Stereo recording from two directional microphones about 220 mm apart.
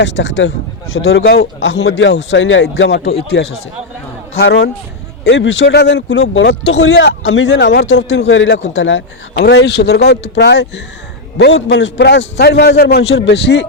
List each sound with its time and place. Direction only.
0.0 s speech: 55° left (ahead or behind)
0.9 s speech: 65° left (ahead or behind)
1.4 s speech: 55° left (ahead or behind)